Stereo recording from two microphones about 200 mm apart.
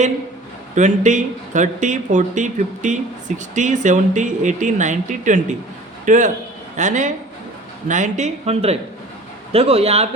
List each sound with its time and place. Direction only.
0.8 s a man's voice: 35° right (ahead or behind)